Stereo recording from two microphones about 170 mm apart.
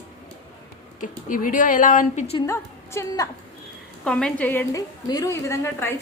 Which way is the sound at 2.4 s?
15° left (ahead or behind).